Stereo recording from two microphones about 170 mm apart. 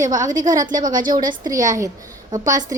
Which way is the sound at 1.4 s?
20° right (ahead or behind).